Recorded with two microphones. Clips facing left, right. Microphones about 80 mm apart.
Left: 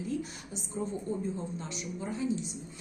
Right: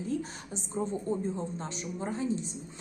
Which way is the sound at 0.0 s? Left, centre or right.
Right.